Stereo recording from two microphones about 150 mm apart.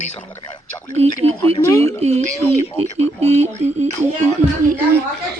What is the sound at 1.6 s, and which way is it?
Speech, 20° left (ahead or behind).